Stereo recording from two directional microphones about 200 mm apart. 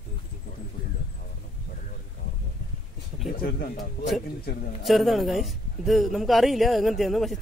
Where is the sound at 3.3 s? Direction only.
45° left (ahead or behind).